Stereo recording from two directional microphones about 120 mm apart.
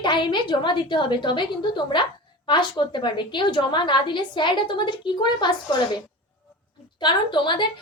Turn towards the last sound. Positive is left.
turn(degrees=40)  # may be behind; listen again after turning